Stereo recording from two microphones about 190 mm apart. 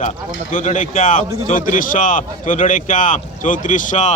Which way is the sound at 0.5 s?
40° left (ahead or behind).